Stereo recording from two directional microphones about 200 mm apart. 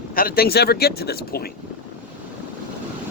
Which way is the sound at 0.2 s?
50° left (ahead or behind).